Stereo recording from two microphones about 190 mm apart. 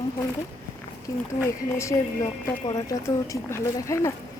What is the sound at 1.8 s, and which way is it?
Speech, 15° left (ahead or behind).